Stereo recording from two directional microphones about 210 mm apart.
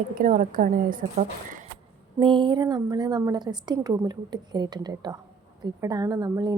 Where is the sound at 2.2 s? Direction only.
25° right (ahead or behind).